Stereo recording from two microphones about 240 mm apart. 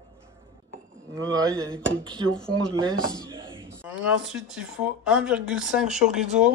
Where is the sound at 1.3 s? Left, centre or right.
Centre.